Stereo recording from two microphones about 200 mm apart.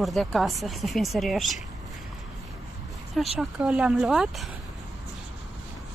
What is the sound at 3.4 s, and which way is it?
A woman's voice, 5° right (ahead or behind).